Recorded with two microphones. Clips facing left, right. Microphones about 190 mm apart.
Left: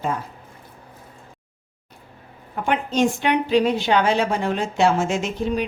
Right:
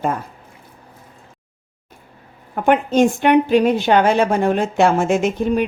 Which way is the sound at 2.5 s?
50° right (ahead or behind).